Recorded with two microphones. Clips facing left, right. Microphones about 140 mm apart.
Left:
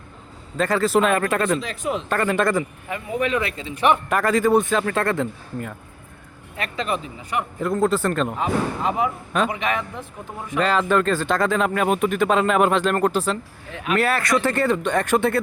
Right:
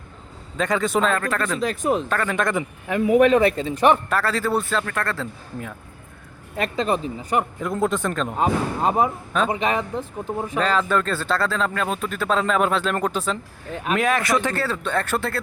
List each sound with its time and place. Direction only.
0.5 s a man's voice: centre (ahead or behind)
1.1 s speech: 20° left (ahead or behind)
1.6 s speech: 45° right (ahead or behind)
2.0 s speech: 10° left (ahead or behind)
3.0 s speech: 90° right
3.2 s speech: 45° right (ahead or behind)
4.1 s speech: 15° left (ahead or behind)
6.6 s speech: 35° right (ahead or behind)
7.6 s a man's voice: centre (ahead or behind)
8.4 s speech: 40° right (ahead or behind)
10.6 s a man's voice: 10° left (ahead or behind)
14.6 s speech: 15° left (ahead or behind)